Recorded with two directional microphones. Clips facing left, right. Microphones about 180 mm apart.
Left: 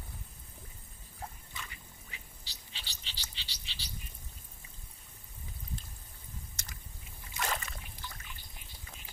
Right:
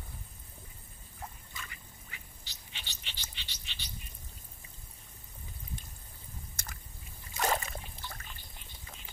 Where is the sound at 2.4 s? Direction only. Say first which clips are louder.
Right 1 dB; 35° left (ahead or behind).